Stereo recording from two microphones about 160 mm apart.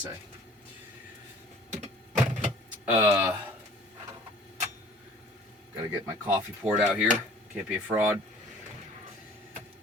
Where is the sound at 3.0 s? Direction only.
15° right (ahead or behind).